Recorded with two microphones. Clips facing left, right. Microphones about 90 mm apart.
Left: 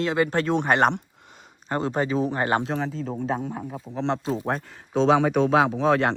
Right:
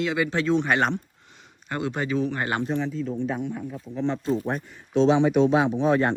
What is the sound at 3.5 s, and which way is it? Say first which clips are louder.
Speech: even; 45° left (ahead or behind).